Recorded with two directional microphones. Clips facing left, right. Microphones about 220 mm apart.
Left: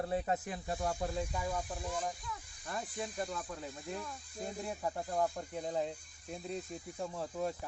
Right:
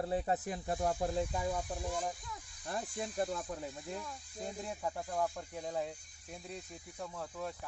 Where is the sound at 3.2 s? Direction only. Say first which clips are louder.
Right 6 dB; 25° right (ahead or behind).